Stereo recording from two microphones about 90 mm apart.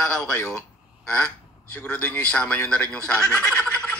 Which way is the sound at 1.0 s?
15° left (ahead or behind).